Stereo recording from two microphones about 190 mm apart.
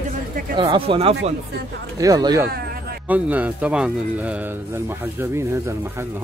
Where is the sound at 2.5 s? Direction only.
55° right (ahead or behind).